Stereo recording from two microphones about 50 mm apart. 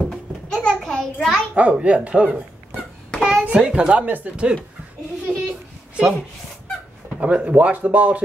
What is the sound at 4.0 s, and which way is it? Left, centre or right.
Speech, right.